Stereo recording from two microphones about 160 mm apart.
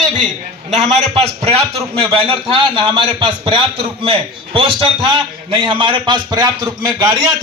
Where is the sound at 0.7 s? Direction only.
45° right (ahead or behind); by 6.7 s 25° right (ahead or behind).